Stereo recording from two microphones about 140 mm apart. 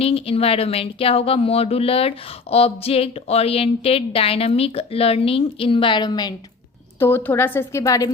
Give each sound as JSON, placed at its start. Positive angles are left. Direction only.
{"t": 0.0, "sound": "speech", "side_deg": 45}
{"t": 7.0, "sound": "a woman's voice", "side_deg": 15}